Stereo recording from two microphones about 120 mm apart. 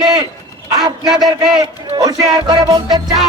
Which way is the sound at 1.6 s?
30° right (ahead or behind).